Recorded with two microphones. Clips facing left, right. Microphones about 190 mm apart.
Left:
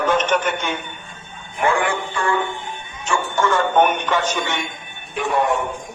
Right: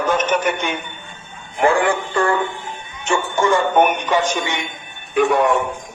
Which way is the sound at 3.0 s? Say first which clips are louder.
Right 2 dB; 20° right (ahead or behind).